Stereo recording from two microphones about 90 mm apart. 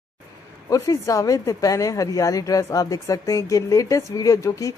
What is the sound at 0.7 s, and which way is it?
A woman's voice, 40° left (ahead or behind).